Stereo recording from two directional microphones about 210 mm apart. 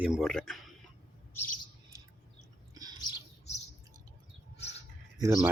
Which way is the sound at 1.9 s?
15° right (ahead or behind).